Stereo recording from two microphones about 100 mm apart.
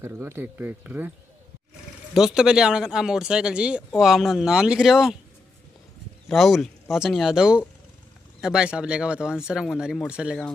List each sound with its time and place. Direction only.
0.0 s speech: 25° right (ahead or behind)
2.1 s speech: 5° right (ahead or behind)
6.2 s speech: centre (ahead or behind)